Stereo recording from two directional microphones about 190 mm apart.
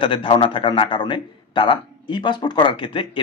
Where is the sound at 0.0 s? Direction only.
25° left (ahead or behind).